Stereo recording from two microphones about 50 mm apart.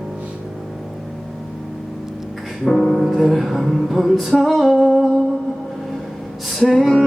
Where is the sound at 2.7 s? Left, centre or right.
Centre.